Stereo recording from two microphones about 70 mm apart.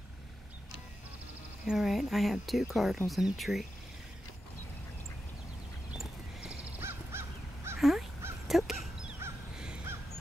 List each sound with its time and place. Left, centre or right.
1.7 s speech: centre
5.9 s horse: centre
6.8 s honk: right
8.5 s a sound: centre
9.9 s goose: right